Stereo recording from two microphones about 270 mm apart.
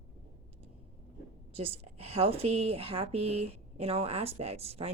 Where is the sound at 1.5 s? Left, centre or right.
Right.